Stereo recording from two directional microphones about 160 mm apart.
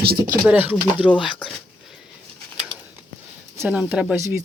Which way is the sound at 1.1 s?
30° left (ahead or behind).